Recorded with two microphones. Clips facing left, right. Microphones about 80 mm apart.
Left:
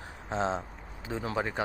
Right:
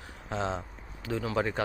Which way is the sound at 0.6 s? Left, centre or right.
Left.